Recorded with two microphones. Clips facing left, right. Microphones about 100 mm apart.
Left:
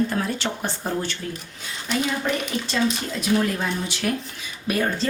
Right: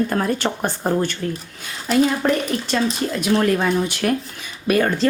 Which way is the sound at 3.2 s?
65° right (ahead or behind).